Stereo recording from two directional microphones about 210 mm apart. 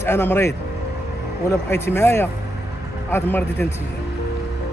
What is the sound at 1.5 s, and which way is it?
Speech, 10° left (ahead or behind).